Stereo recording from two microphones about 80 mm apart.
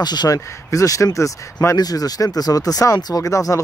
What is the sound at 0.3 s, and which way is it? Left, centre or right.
Speech, left.